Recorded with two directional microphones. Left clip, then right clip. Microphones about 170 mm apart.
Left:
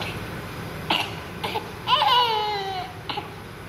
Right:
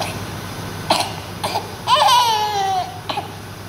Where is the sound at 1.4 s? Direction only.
20° right (ahead or behind).